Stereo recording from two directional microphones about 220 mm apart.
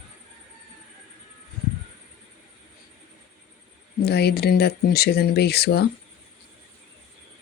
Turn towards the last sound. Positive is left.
turn(degrees=45)  # may be behind; listen again after turning